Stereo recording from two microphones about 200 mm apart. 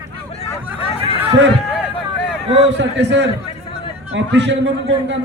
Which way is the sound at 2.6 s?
60° right (ahead or behind).